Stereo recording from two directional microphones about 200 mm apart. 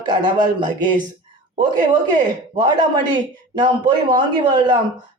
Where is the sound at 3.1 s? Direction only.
20° right (ahead or behind).